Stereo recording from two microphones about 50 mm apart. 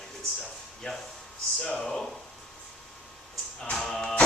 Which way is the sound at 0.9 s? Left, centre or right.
Left.